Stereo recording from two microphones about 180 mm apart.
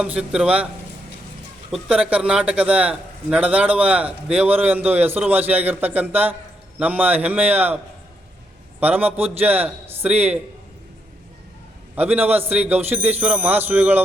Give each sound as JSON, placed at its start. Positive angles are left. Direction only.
{"t": 0.0, "sound": "speech", "side_deg": -5}
{"t": 1.7, "sound": "speech", "side_deg": -5}
{"t": 8.8, "sound": "speech", "side_deg": -10}
{"t": 11.9, "sound": "speech", "side_deg": -10}